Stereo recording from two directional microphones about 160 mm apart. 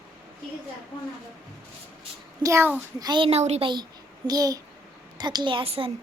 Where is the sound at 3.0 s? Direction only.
30° right (ahead or behind).